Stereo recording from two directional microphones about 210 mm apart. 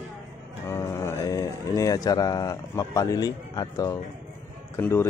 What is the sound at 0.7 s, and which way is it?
Speech, 15° left (ahead or behind).